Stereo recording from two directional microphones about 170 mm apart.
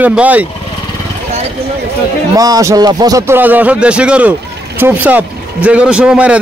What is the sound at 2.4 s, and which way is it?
A man's voice, 20° right (ahead or behind).